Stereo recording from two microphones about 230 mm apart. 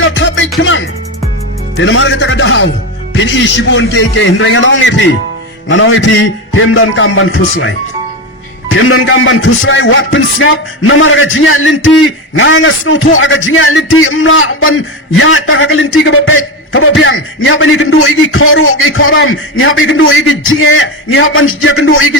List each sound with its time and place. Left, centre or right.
0.0 s music: left
1.7 s a man's voice: left